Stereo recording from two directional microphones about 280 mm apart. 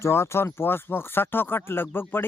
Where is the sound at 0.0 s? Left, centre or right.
Centre.